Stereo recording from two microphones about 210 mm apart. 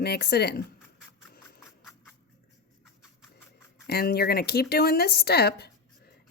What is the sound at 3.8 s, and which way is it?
Speech, 50° left (ahead or behind).